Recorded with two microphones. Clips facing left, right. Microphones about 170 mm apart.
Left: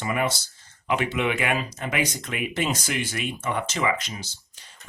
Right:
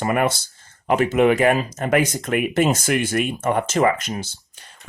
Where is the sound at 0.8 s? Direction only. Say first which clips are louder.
Right 8 dB; 45° right (ahead or behind).